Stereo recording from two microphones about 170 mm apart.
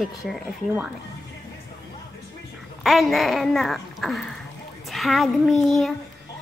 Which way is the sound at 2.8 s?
Centre (ahead or behind).